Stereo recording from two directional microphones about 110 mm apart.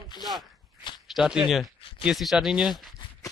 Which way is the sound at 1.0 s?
5° right (ahead or behind).